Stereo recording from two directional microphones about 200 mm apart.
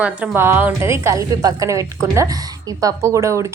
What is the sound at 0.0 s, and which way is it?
A woman's voice, 10° right (ahead or behind).